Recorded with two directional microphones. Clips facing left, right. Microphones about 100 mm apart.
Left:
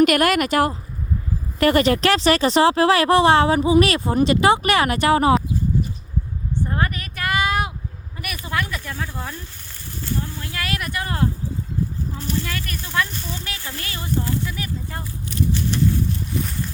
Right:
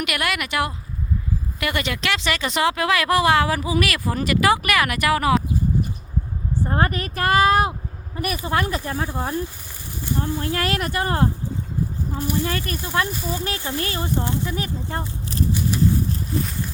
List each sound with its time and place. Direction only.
0.0 s a woman's voice: 45° left (ahead or behind)
6.6 s speech: 35° right (ahead or behind)
9.0 s speech: 20° right (ahead or behind)
10.4 s speech: 35° right (ahead or behind)
12.1 s speech: 15° right (ahead or behind)
12.5 s speech: 30° right (ahead or behind)
13.1 s speech: 10° right (ahead or behind)
13.6 s speech: 20° right (ahead or behind)
16.3 s a sound: 35° right (ahead or behind)